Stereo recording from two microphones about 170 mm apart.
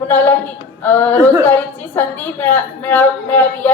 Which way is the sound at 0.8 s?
10° left (ahead or behind).